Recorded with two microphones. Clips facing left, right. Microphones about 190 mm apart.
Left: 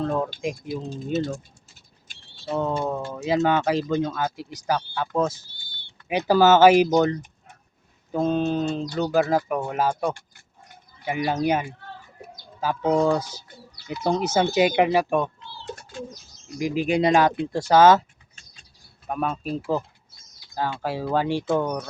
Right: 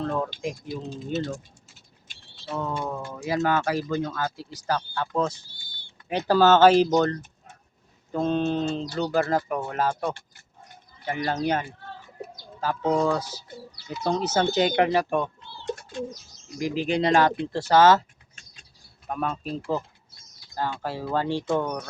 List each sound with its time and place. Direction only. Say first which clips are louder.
0.0 s speech: left 3 dB; 10° left (ahead or behind)
2.5 s speech: left 5 dB; 25° left (ahead or behind); by 15.3 s 5° left (ahead or behind)
16.6 s speech: left 3 dB; 10° left (ahead or behind)
19.0 s speech: left 2 dB; 10° left (ahead or behind)